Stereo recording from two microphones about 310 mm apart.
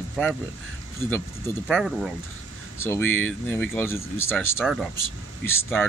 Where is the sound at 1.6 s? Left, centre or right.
Centre.